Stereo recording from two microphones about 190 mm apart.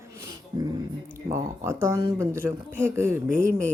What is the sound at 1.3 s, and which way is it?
Speech, 15° right (ahead or behind).